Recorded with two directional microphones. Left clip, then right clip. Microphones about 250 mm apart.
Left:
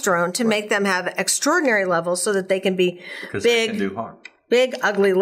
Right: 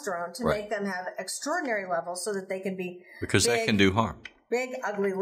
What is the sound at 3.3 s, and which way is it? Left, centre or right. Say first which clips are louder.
Speech: left 6 dB; right.